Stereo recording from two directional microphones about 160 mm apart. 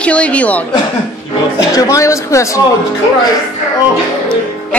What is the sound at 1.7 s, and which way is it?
Speech, 20° left (ahead or behind).